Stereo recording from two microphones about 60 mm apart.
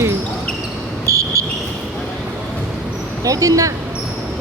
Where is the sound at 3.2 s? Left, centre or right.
Right.